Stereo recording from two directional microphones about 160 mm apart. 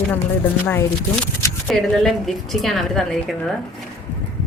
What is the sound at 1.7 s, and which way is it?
A woman's voice, centre (ahead or behind).